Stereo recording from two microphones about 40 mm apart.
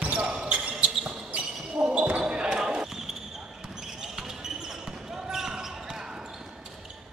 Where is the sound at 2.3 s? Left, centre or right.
Right.